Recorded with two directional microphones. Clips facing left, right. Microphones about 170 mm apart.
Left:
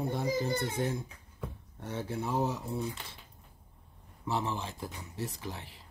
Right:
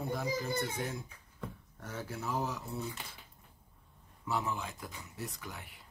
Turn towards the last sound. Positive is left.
turn(degrees=30)  # may be behind; listen again after turning